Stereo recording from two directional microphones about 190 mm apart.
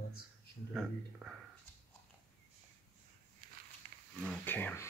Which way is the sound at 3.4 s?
45° right (ahead or behind).